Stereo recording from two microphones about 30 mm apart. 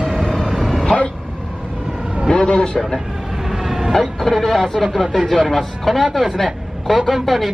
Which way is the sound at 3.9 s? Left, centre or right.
Centre.